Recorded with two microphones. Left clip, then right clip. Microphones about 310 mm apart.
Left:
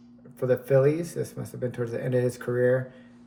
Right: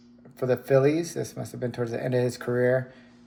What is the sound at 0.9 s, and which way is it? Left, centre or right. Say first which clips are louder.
Speech: right 1 dB; centre.